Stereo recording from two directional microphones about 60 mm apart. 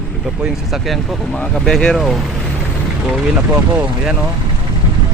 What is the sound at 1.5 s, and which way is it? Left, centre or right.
Speech, centre.